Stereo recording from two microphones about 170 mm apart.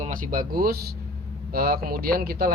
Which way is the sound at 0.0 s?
55° right (ahead or behind).